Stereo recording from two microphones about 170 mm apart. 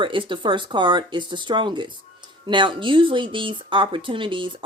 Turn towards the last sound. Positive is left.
turn(degrees=-30)  # may be behind; listen again after turning